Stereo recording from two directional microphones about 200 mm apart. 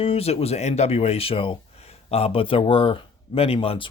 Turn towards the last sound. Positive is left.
turn(degrees=25)  # may be behind; listen again after turning